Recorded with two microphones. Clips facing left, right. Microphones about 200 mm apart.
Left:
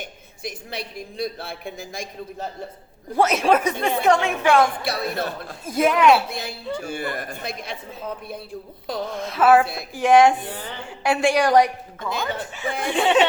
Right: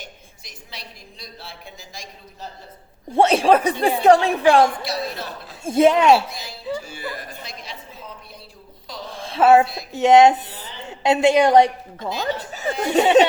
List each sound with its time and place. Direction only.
0.0 s a woman's voice: 55° left (ahead or behind)
3.2 s speech: 30° right (ahead or behind)
4.8 s a woman's voice: 55° left (ahead or behind)
5.6 s a woman's voice: 25° right (ahead or behind)
6.7 s a woman's voice: 55° left (ahead or behind)
9.0 s a woman's voice: 30° right (ahead or behind)
10.4 s a woman's voice: 60° left (ahead or behind)
10.8 s a woman's voice: 20° right (ahead or behind)
11.9 s speech: 55° left (ahead or behind)
12.5 s speech: 40° right (ahead or behind)